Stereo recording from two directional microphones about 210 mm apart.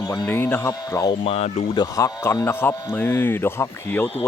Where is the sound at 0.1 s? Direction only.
15° left (ahead or behind).